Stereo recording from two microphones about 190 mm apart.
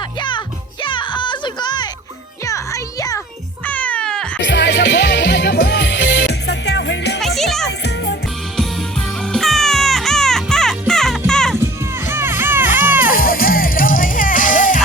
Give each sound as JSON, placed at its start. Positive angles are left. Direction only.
{"t": 0.2, "sound": "music", "side_deg": 25}
{"t": 4.4, "sound": "music", "side_deg": 65}
{"t": 7.2, "sound": "music", "side_deg": 0}
{"t": 9.2, "sound": "music", "side_deg": 0}
{"t": 11.5, "sound": "music", "side_deg": -15}
{"t": 13.1, "sound": "music", "side_deg": 50}